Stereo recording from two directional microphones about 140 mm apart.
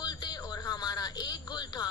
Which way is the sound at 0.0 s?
30° left (ahead or behind).